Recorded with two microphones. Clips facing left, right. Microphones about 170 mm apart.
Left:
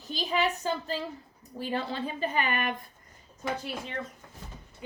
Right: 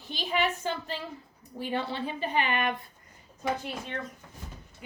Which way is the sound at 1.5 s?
40° left (ahead or behind).